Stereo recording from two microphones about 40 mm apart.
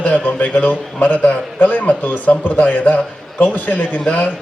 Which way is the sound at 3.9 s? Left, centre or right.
Left.